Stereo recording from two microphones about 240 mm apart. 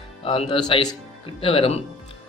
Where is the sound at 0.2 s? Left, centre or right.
Left.